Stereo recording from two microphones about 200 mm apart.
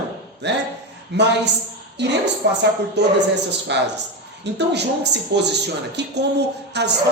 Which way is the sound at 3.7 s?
60° right (ahead or behind).